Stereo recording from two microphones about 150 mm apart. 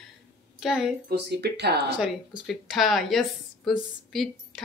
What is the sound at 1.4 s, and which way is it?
Speech, 90° right.